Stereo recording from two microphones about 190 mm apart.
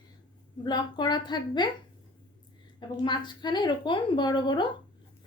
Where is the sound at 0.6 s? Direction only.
20° left (ahead or behind).